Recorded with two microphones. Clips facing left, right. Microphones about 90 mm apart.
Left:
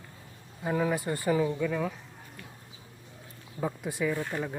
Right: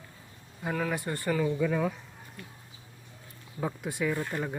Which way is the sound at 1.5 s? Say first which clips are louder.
Right 2 dB; 5° right (ahead or behind).